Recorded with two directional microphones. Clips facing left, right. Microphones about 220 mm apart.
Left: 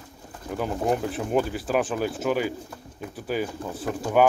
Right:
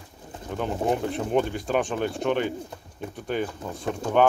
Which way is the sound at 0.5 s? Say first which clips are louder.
Even; 5° left (ahead or behind).